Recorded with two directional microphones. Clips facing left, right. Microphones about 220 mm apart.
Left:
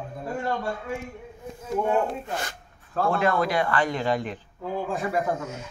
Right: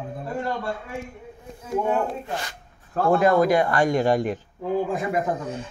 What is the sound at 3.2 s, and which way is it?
Speech, 45° right (ahead or behind).